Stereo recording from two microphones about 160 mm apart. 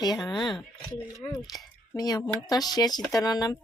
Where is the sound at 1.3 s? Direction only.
25° left (ahead or behind).